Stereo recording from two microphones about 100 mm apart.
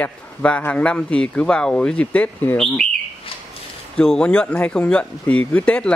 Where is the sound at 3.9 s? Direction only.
10° left (ahead or behind).